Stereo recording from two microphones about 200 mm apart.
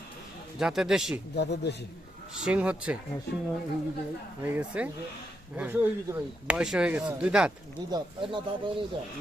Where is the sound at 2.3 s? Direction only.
5° right (ahead or behind).